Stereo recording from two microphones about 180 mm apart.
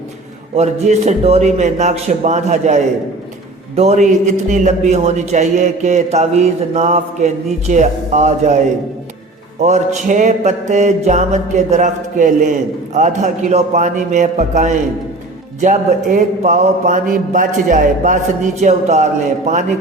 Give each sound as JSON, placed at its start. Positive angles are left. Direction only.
{"t": 0.5, "sound": "mantra", "side_deg": -35}